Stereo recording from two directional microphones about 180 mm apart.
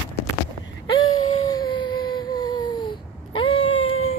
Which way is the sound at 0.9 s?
20° left (ahead or behind).